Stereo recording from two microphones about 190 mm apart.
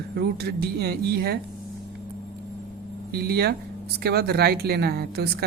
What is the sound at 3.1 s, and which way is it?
A woman's voice, 55° right (ahead or behind).